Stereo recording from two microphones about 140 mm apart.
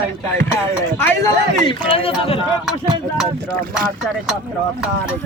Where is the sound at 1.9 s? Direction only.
40° left (ahead or behind).